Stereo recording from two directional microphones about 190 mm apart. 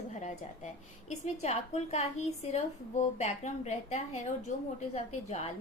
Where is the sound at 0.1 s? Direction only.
40° left (ahead or behind).